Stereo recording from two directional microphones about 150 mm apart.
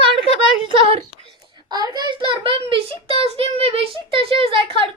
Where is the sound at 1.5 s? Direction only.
30° right (ahead or behind).